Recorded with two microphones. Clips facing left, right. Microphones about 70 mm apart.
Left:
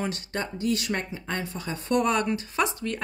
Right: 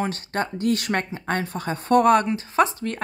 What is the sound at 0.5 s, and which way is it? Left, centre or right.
A woman's voice, right.